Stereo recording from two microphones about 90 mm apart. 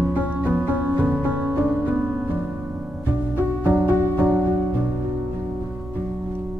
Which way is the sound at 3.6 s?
20° right (ahead or behind).